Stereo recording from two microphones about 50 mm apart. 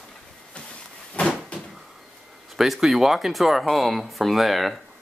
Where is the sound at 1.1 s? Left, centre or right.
Left.